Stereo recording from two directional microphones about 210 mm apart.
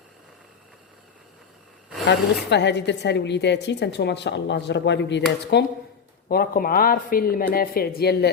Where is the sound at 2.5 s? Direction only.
55° left (ahead or behind).